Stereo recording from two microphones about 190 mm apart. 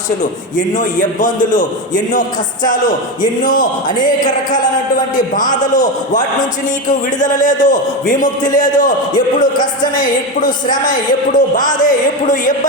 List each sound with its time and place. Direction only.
0.2 s a man's voice: 40° left (ahead or behind)
3.8 s speech: 20° left (ahead or behind)
4.2 s a man's voice: 40° left (ahead or behind)